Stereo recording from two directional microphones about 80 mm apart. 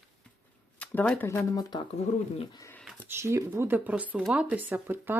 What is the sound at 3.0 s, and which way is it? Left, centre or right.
Speech, right.